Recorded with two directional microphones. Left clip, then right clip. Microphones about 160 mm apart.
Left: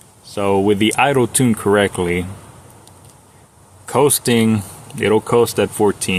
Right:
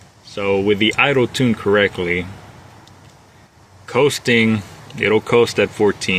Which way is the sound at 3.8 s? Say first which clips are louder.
Left 1 dB; 35° left (ahead or behind).